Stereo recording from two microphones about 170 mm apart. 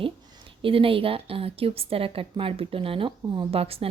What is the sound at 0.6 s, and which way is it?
A woman's voice, 30° right (ahead or behind).